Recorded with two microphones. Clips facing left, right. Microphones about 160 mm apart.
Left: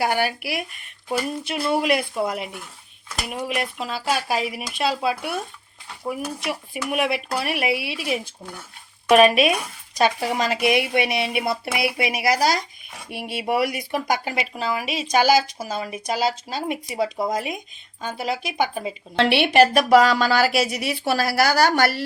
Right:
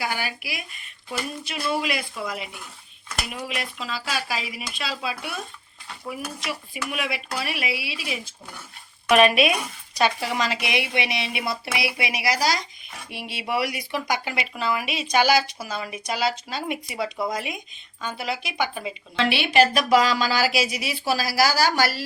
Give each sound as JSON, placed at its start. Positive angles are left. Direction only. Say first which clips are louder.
{"t": 0.0, "sound": "speech", "louder": "left 7 dB", "side_deg": 55}
{"t": 1.6, "sound": "speech", "louder": "left 5 dB", "side_deg": 55}
{"t": 6.4, "sound": "speech", "louder": "left 4 dB", "side_deg": 55}
{"t": 9.0, "sound": "speech", "louder": "left 3 dB", "side_deg": 40}
{"t": 19.1, "sound": "speech", "louder": "left 4 dB", "side_deg": 65}